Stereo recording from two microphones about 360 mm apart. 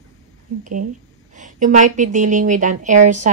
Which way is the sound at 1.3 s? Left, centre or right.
Right.